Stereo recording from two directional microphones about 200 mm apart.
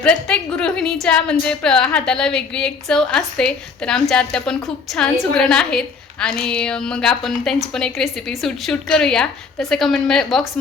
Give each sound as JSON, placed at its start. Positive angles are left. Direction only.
{"t": 0.0, "sound": "a woman's voice", "side_deg": 5}